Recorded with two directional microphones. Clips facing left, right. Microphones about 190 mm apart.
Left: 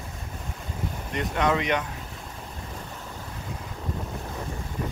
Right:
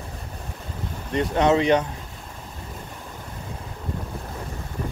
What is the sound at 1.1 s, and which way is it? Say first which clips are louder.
Speech: right 6 dB; 30° right (ahead or behind).